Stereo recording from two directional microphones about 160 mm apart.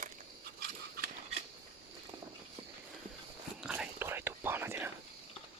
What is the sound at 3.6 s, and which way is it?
Whispering, 5° right (ahead or behind).